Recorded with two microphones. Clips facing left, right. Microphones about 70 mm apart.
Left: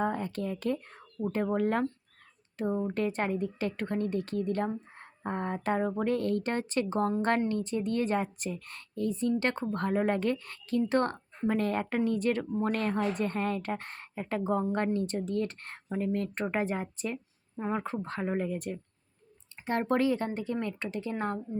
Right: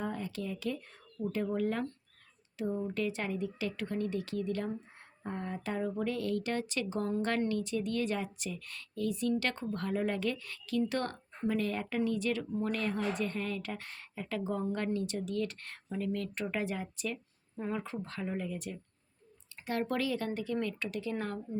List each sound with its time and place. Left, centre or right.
0.0 s speech: left